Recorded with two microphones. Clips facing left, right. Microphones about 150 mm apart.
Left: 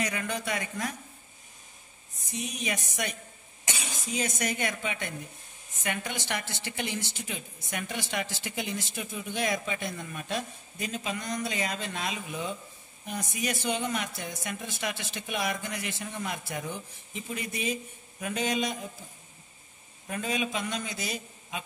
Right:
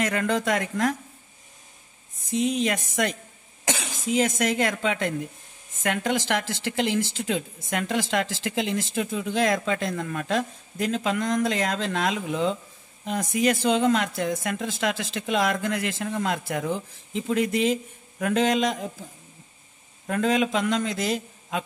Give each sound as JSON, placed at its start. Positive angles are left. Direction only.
{"t": 0.0, "sound": "a woman's voice", "side_deg": -85}
{"t": 2.3, "sound": "a woman's voice", "side_deg": -90}
{"t": 20.1, "sound": "a woman's voice", "side_deg": -90}